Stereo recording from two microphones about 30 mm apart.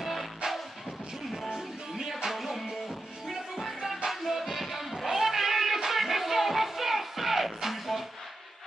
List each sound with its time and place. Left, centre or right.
0.0 s music: centre
2.3 s music: centre
2.6 s music: centre
3.6 s music: centre